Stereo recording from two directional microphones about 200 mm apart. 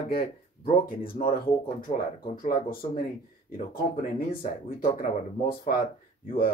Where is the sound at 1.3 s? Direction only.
45° left (ahead or behind).